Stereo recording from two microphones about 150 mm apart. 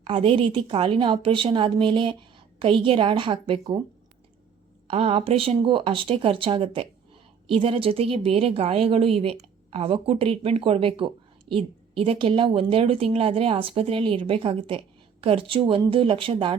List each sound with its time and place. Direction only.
0.0 s speech: 35° right (ahead or behind)
4.9 s speech: 40° right (ahead or behind)